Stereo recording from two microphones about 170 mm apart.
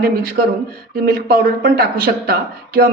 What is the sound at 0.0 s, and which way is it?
A woman's voice, 60° right (ahead or behind).